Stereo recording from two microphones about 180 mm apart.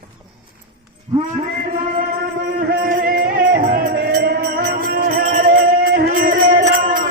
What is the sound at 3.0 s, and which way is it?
Music, 50° right (ahead or behind).